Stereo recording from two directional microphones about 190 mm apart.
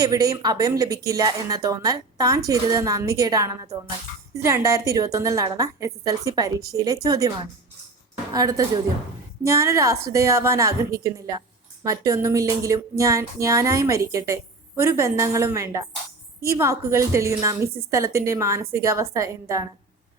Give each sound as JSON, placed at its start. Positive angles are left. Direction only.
{"t": 0.0, "sound": "a woman's voice", "side_deg": -20}